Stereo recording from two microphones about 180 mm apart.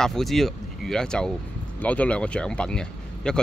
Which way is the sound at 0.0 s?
Centre (ahead or behind).